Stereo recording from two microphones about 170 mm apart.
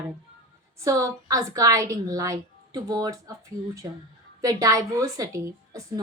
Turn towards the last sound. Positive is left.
turn(degrees=-20)  # may be behind; listen again after turning